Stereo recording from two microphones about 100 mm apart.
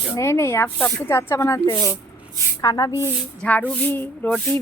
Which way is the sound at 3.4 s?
10° left (ahead or behind).